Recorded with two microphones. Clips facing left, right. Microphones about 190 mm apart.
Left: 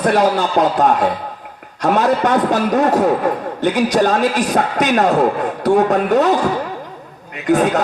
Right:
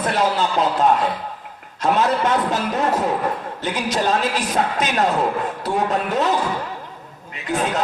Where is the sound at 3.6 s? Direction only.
55° left (ahead or behind).